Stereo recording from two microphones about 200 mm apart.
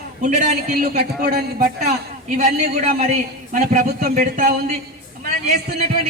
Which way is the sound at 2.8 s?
35° right (ahead or behind).